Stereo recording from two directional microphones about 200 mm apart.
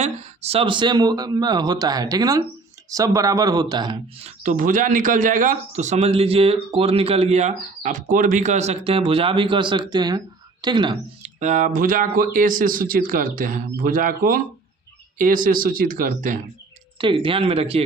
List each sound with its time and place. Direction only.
0.0 s speech: 30° right (ahead or behind)
11.3 s speech: 40° right (ahead or behind)
17.0 s speech: 25° right (ahead or behind)